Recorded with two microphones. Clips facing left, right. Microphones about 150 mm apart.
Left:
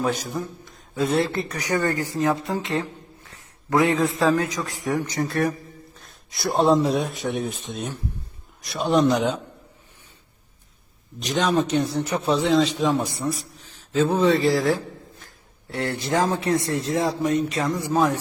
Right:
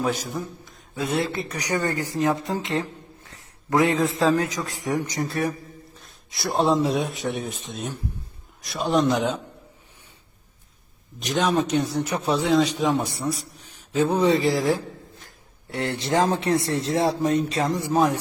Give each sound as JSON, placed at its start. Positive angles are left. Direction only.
{"t": 0.0, "sound": "a man's voice", "side_deg": -5}
{"t": 1.5, "sound": "a man's voice", "side_deg": -15}
{"t": 3.8, "sound": "a man's voice", "side_deg": -20}
{"t": 6.0, "sound": "speech", "side_deg": 0}
{"t": 11.3, "sound": "a man's voice", "side_deg": -5}